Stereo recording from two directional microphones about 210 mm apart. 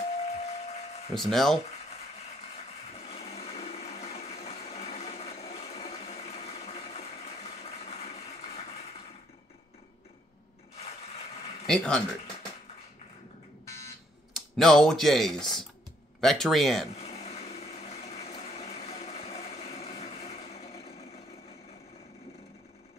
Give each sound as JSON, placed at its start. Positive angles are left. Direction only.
{"t": 0.3, "sound": "train", "side_deg": 30}
{"t": 1.1, "sound": "speech", "side_deg": 0}
{"t": 1.9, "sound": "blender", "side_deg": 30}
{"t": 11.6, "sound": "speech", "side_deg": 5}
{"t": 14.3, "sound": "speech", "side_deg": 0}
{"t": 16.9, "sound": "a sound", "side_deg": 30}